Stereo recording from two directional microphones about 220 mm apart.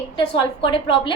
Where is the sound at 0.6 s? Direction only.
20° left (ahead or behind).